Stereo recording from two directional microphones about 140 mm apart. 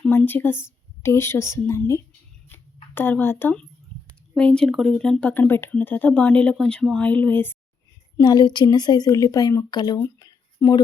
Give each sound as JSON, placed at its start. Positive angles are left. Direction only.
{"t": 0.1, "sound": "a woman's voice", "side_deg": 15}
{"t": 2.5, "sound": "a sound", "side_deg": 15}
{"t": 4.4, "sound": "speech", "side_deg": 5}
{"t": 8.2, "sound": "speech", "side_deg": 30}